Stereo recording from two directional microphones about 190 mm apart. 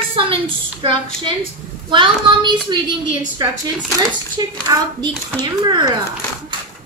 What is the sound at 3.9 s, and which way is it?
Speech, 20° right (ahead or behind).